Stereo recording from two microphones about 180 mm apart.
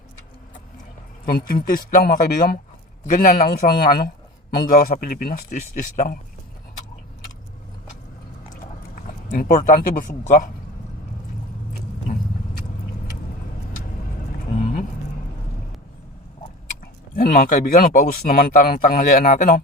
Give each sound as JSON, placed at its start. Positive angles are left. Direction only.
{"t": 1.2, "sound": "a man's voice", "side_deg": 55}
{"t": 8.5, "sound": "speech", "side_deg": 50}
{"t": 17.2, "sound": "speech", "side_deg": 50}